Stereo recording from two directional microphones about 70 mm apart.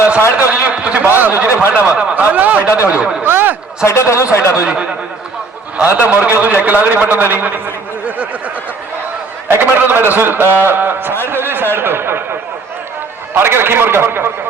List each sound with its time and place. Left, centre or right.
0.3 s a sound: centre
1.0 s a man's voice: right
1.7 s a man's voice: centre
2.6 s speech: left
2.9 s speech: centre
3.2 s a man's voice: right
3.8 s speech: left
4.6 s a man's voice: centre
9.5 s a man's voice: right
13.3 s a man's voice: right